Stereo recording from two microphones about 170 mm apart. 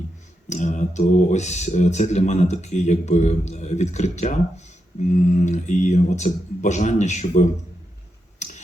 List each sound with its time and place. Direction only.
0.4 s speech: 45° left (ahead or behind)